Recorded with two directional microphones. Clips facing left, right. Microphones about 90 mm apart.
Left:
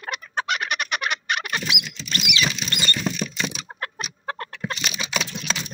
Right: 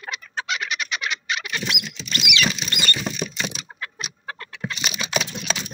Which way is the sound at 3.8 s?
45° left (ahead or behind).